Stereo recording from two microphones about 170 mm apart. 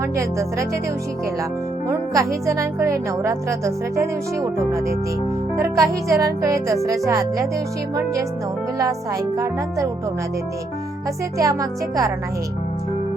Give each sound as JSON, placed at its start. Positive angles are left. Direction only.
{"t": 1.9, "sound": "speech", "side_deg": -20}
{"t": 9.4, "sound": "speech", "side_deg": -20}
{"t": 11.3, "sound": "speech", "side_deg": -20}